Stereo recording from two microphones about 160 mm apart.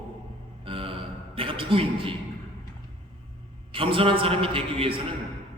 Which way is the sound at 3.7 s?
35° right (ahead or behind).